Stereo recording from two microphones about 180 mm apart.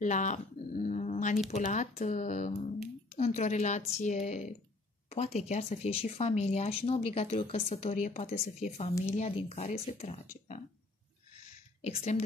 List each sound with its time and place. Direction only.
0.0 s speech: 45° left (ahead or behind)
11.8 s speech: 40° left (ahead or behind)